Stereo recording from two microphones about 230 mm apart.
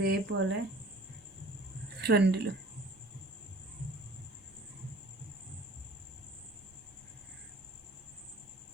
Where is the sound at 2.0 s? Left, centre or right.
Right.